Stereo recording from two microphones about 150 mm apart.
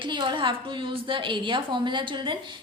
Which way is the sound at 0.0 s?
30° right (ahead or behind).